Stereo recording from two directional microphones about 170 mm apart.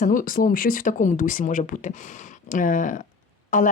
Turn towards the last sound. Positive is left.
turn(degrees=50)  # may be behind; listen again after turning